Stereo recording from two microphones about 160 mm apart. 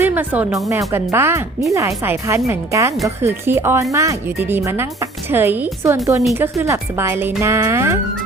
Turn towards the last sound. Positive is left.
turn(degrees=-15)  # may be behind; listen again after turning